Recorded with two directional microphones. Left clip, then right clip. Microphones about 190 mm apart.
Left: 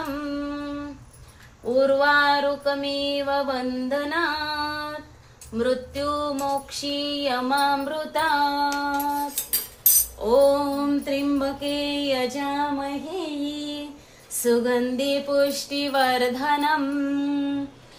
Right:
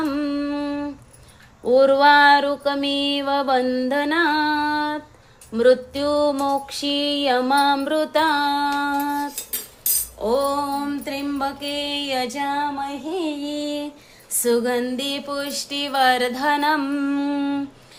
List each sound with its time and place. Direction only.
0.3 s humming: 50° right (ahead or behind)
1.6 s female singing: 55° right (ahead or behind)
5.5 s music: 55° right (ahead or behind)
10.2 s a sound: 35° right (ahead or behind)
13.1 s music: 30° right (ahead or behind)
14.3 s a sound: 30° right (ahead or behind)